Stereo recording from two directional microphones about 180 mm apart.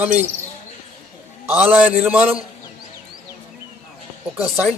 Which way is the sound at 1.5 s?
10° right (ahead or behind).